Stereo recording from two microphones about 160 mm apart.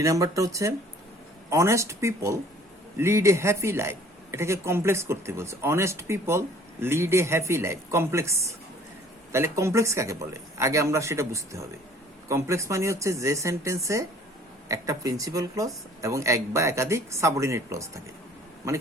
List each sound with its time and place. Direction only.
0.0 s a man's voice: 20° right (ahead or behind)